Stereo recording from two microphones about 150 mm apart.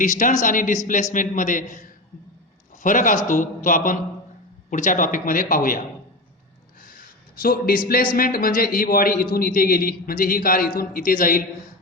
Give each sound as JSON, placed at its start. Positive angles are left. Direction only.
{"t": 0.0, "sound": "a man's voice", "side_deg": 60}
{"t": 2.8, "sound": "a man's voice", "side_deg": 60}
{"t": 6.8, "sound": "a sound", "side_deg": 75}
{"t": 8.1, "sound": "a man's voice", "side_deg": 75}